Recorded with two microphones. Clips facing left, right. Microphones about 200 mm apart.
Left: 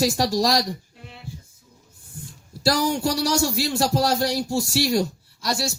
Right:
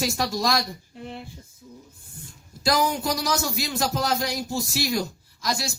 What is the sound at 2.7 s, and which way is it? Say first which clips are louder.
A man's voice: left 2 dB; 30° left (ahead or behind).